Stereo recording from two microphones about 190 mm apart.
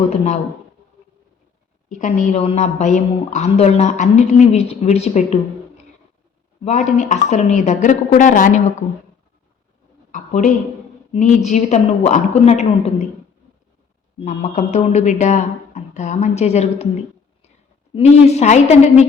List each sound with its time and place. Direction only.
1.9 s a woman's voice: 40° left (ahead or behind)
10.1 s a woman's voice: 40° left (ahead or behind)
14.2 s a woman's voice: 35° left (ahead or behind)
17.9 s a woman's voice: 35° left (ahead or behind)